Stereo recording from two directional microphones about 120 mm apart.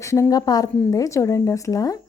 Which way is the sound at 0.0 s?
25° left (ahead or behind).